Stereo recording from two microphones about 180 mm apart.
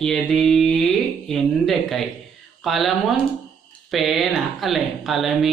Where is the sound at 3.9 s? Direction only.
Centre (ahead or behind).